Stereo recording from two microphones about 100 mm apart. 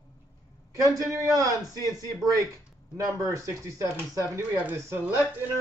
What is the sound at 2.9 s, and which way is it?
Speech, 30° right (ahead or behind).